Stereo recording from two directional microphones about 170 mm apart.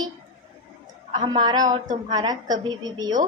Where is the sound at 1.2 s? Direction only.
25° right (ahead or behind).